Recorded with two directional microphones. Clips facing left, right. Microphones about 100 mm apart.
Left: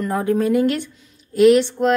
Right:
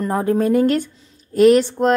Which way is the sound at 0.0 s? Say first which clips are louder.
Right 1 dB; 35° right (ahead or behind).